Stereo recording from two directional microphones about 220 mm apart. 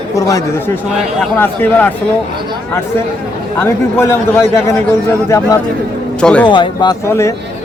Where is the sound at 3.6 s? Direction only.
10° left (ahead or behind).